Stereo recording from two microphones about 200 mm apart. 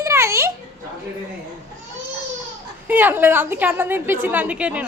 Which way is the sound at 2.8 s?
10° right (ahead or behind).